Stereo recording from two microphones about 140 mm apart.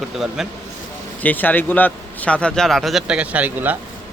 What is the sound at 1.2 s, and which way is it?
A man's voice, 15° left (ahead or behind).